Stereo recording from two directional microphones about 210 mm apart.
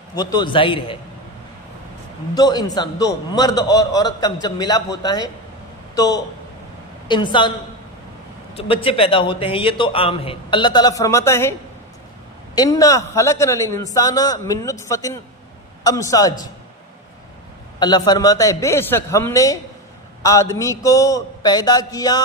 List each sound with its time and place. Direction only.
0.1 s a man's voice: 20° left (ahead or behind)
2.3 s a man's voice: 20° left (ahead or behind)
8.5 s a man's voice: 25° left (ahead or behind)
12.5 s a man's voice: 15° left (ahead or behind)
17.7 s a man's voice: 20° left (ahead or behind)